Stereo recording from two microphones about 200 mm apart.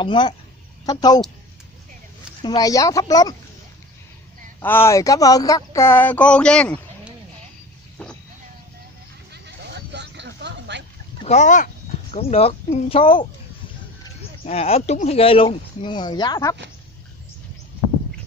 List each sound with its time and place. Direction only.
0.0 s speech: 25° left (ahead or behind)
2.4 s speech: 20° left (ahead or behind)
4.6 s speech: 10° left (ahead or behind)
8.0 s vehicle: 5° left (ahead or behind)
9.3 s a sound: 55° right (ahead or behind)
11.2 s speech: 35° left (ahead or behind)
14.4 s speech: 30° left (ahead or behind)